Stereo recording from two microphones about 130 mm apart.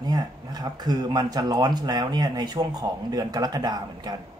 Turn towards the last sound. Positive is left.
turn(degrees=-30)  # may be behind; listen again after turning